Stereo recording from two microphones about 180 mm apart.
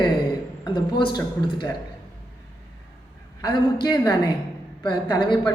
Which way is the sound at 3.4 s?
20° left (ahead or behind).